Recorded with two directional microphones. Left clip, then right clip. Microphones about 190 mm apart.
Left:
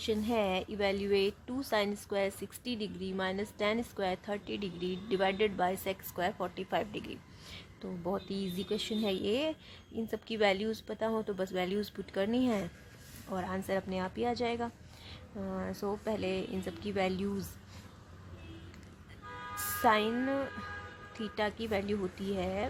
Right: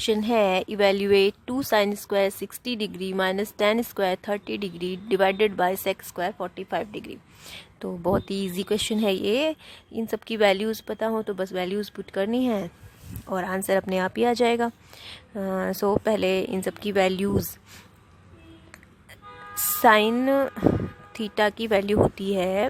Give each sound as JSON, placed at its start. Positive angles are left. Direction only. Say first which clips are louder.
{"t": 0.0, "sound": "speech", "louder": "right 10 dB", "side_deg": -50}
{"t": 13.2, "sound": "a woman's voice", "louder": "right 10 dB", "side_deg": -45}
{"t": 19.8, "sound": "a woman's voice", "louder": "right 11 dB", "side_deg": -45}